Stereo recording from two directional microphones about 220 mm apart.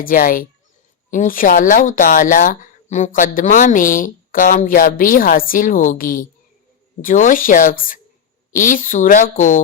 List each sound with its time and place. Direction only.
0.0 s speech: 40° left (ahead or behind)